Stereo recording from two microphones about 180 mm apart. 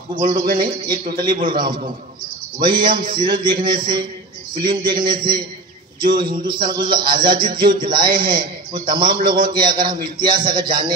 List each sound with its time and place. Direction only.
1.1 s a man's voice: 25° right (ahead or behind)